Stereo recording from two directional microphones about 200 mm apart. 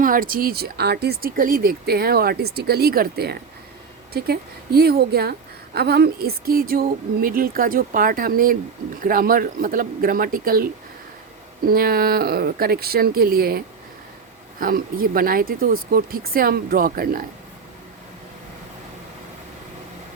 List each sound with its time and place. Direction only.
0.0 s speech: 45° right (ahead or behind)
11.7 s speech: 50° right (ahead or behind)
14.6 s speech: 45° right (ahead or behind)